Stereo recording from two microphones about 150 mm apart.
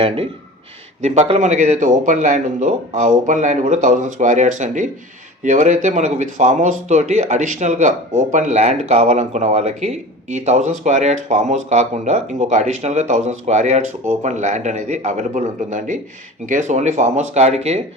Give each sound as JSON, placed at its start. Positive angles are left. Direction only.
{"t": 1.0, "sound": "speech", "side_deg": -45}